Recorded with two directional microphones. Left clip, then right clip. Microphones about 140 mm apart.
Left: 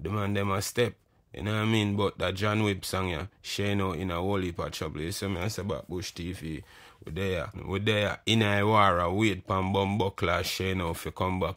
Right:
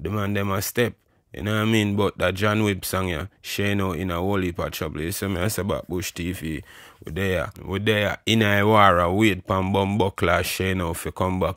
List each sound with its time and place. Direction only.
0.0 s speech: 35° right (ahead or behind)
5.4 s speech: 60° right (ahead or behind); by 7.5 s 45° right (ahead or behind)
7.6 s speech: 35° right (ahead or behind)